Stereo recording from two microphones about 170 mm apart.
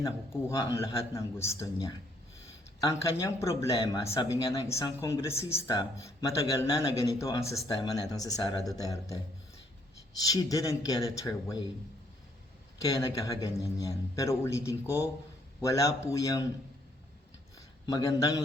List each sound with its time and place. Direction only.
0.0 s a man's voice: 20° left (ahead or behind)
10.2 s a man's voice: 20° left (ahead or behind)
12.8 s a man's voice: 20° left (ahead or behind)
17.8 s a man's voice: 20° left (ahead or behind)